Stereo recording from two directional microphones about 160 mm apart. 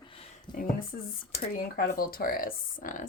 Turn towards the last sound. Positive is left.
turn(degrees=60)  # may be behind; listen again after turning